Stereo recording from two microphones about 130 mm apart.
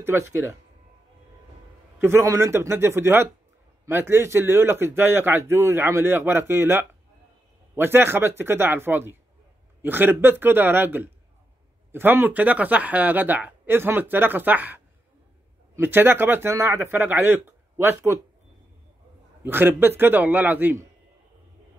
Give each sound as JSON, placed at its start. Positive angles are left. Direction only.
{"t": 0.0, "sound": "speech", "side_deg": -20}
{"t": 2.0, "sound": "speech", "side_deg": -20}
{"t": 19.4, "sound": "speech", "side_deg": -15}